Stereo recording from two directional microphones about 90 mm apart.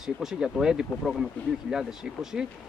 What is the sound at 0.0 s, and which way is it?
Speech, 5° right (ahead or behind).